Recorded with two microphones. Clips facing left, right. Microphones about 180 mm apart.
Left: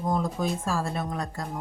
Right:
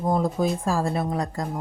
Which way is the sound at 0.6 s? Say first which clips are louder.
Right 5 dB; 15° right (ahead or behind).